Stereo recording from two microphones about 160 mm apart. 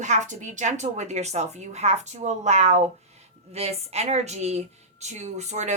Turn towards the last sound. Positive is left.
turn(degrees=-45)  # may be behind; listen again after turning